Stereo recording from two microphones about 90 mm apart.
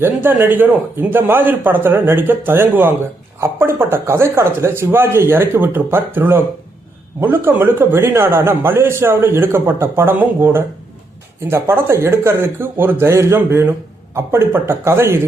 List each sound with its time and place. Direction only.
0.0 s a man's voice: 25° right (ahead or behind)